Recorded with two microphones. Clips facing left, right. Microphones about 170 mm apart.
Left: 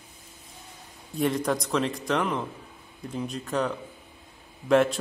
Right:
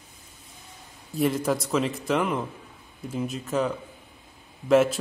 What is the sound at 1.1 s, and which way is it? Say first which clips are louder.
A man's voice: right 1 dB; centre (ahead or behind).